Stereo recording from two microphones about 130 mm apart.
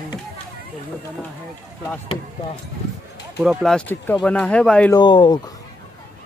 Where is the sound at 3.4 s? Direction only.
5° right (ahead or behind).